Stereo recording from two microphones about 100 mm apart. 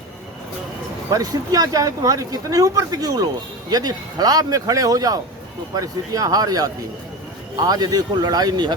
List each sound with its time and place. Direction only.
1.1 s speech: 40° right (ahead or behind)